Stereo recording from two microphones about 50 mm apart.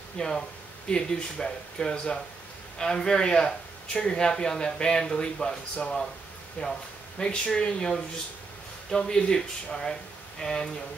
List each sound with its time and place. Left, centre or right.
0.2 s speech: centre